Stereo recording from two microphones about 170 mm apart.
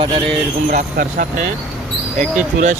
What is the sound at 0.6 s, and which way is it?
Speech, 55° right (ahead or behind).